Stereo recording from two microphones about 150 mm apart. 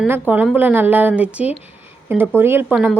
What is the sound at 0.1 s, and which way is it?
A woman's voice, 10° right (ahead or behind).